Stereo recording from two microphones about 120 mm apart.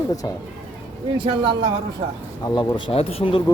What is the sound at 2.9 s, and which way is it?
Speech, 55° left (ahead or behind).